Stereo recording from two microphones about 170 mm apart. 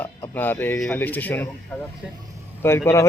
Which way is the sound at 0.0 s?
10° left (ahead or behind).